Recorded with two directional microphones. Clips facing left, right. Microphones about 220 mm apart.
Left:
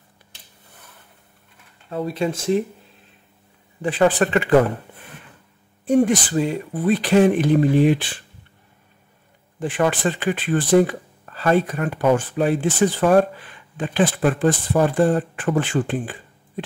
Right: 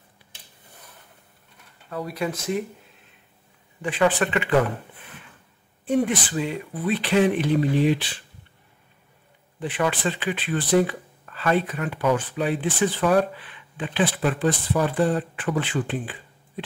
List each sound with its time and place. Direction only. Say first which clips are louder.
1.9 s speech: left 5 dB; 25° left (ahead or behind)
3.8 s speech: left 4 dB; 40° left (ahead or behind)
5.9 s speech: left 5 dB; 40° left (ahead or behind)
9.6 s speech: left 4 dB; 45° left (ahead or behind)